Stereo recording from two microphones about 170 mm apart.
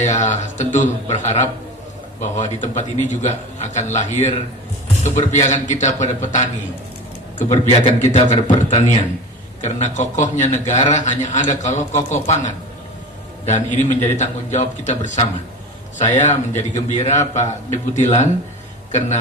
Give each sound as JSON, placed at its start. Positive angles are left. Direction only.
{"t": 0.0, "sound": "a man's voice", "side_deg": 45}
{"t": 9.6, "sound": "a man's voice", "side_deg": 45}